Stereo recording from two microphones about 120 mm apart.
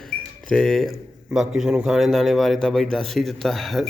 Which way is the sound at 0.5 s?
Centre (ahead or behind).